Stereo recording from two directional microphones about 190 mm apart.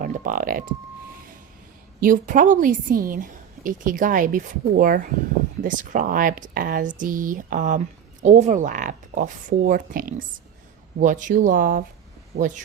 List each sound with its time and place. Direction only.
0.0 s speech: 45° right (ahead or behind)
2.0 s a woman's voice: 45° right (ahead or behind)